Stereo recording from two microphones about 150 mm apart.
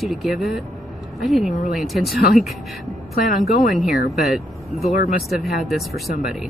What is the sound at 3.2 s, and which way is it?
A woman's voice, 70° left (ahead or behind).